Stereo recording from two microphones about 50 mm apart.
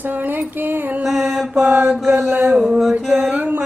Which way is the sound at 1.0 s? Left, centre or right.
Centre.